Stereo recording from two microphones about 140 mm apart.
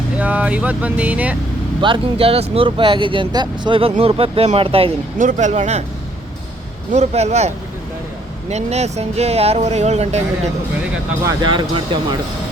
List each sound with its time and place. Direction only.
0.2 s speech: 10° right (ahead or behind)
1.8 s speech: 40° right (ahead or behind)
5.1 s speech: 60° right (ahead or behind)
6.9 s speech: 50° right (ahead or behind)
11.3 s speech: 35° right (ahead or behind)